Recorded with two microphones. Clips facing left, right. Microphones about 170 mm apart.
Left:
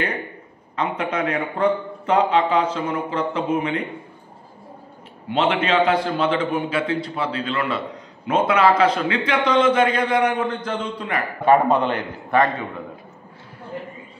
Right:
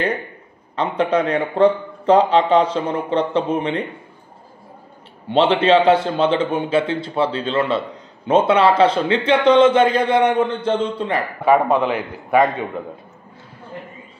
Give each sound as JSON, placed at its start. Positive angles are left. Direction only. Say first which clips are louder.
{"t": 0.7, "sound": "speech", "louder": "right 5 dB", "side_deg": -35}
{"t": 5.3, "sound": "a man's voice", "louder": "right 6 dB", "side_deg": -35}
{"t": 11.4, "sound": "a man's voice", "louder": "right 1 dB", "side_deg": -5}